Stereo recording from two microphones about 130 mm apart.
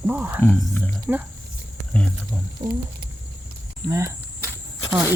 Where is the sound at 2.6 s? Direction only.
40° right (ahead or behind).